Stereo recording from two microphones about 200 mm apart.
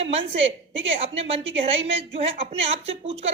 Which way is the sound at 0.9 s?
30° right (ahead or behind).